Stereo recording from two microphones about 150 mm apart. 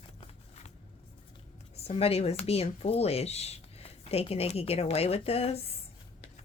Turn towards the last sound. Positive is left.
turn(degrees=40)  # may be behind; listen again after turning